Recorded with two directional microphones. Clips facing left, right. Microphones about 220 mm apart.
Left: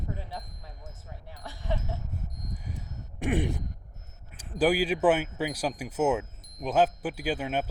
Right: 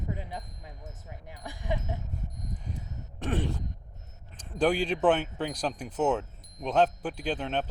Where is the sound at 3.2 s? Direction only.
15° left (ahead or behind).